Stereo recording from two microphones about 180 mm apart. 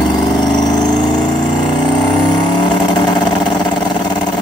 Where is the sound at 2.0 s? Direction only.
25° left (ahead or behind).